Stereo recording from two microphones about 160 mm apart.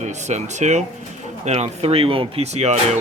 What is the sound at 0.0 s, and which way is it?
Speech, 45° right (ahead or behind).